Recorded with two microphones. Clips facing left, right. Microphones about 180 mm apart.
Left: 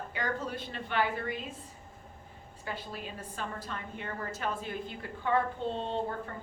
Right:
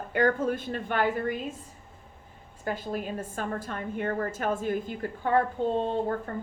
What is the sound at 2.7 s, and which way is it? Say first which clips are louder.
A woman's voice: right 8 dB; 45° right (ahead or behind).